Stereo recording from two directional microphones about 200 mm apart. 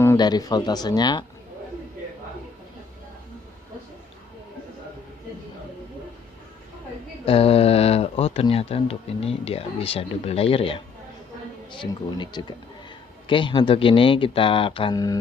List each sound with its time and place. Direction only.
0.0 s speech: 15° left (ahead or behind)
7.3 s speech: 30° left (ahead or behind)